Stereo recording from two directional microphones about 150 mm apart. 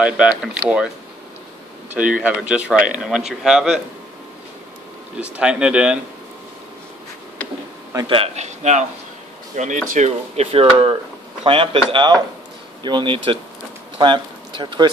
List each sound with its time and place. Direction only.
0.0 s speech: 5° right (ahead or behind)
2.0 s speech: 10° right (ahead or behind)
5.3 s speech: 5° right (ahead or behind)
8.1 s a man's voice: 45° right (ahead or behind)